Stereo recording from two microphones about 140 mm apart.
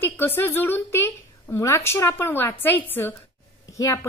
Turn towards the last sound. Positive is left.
turn(degrees=20)  # may be behind; listen again after turning